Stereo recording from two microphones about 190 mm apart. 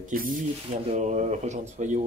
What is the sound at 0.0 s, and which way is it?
Speech, 45° right (ahead or behind).